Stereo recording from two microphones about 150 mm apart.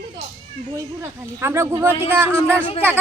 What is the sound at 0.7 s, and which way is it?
Speech, 20° right (ahead or behind).